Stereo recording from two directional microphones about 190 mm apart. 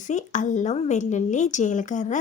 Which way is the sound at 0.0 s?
40° left (ahead or behind).